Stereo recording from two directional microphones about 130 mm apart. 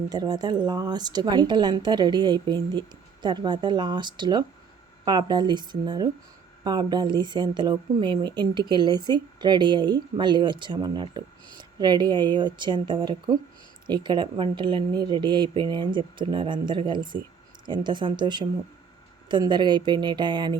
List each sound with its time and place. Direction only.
0.1 s speech: 30° right (ahead or behind)